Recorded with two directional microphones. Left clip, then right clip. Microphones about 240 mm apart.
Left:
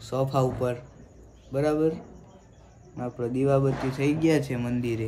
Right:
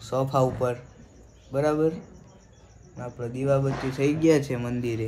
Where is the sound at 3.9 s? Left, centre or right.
Centre.